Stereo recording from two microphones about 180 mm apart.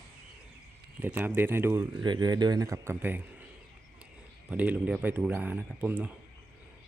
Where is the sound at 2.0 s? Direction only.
25° right (ahead or behind).